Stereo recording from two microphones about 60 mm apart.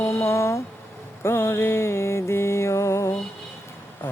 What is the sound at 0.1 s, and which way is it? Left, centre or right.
Speech, left.